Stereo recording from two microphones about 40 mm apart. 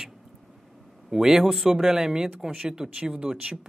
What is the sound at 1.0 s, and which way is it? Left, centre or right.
Speech, centre.